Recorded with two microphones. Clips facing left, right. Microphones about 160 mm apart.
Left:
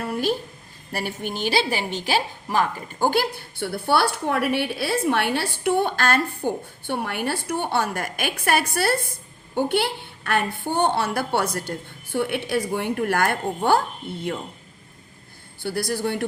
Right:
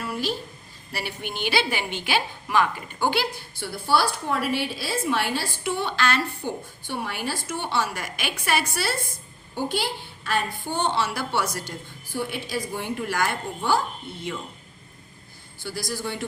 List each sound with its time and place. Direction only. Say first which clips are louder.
0.0 s a sound: left 5 dB; 50° left (ahead or behind)
0.9 s a woman's voice: left 4 dB; 40° left (ahead or behind)
15.6 s a woman's voice: left 6 dB; 60° left (ahead or behind)